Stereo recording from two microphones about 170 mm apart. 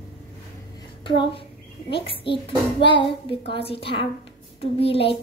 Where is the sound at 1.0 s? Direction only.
30° left (ahead or behind).